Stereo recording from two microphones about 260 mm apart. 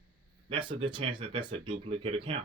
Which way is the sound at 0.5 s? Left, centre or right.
Centre.